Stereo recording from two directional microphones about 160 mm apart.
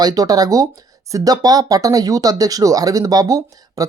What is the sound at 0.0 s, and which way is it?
Speech, 25° right (ahead or behind).